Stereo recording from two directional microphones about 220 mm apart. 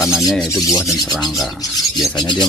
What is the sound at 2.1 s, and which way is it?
Rub, 20° left (ahead or behind).